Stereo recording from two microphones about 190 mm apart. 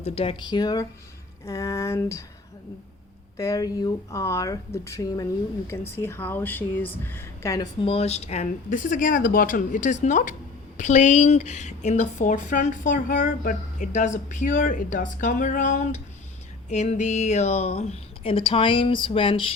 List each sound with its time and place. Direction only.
0.0 s speech: 30° left (ahead or behind); by 2.2 s 15° left (ahead or behind)
3.3 s speech: 20° left (ahead or behind)